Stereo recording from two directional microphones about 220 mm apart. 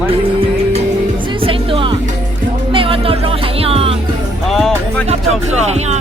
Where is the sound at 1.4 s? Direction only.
25° right (ahead or behind).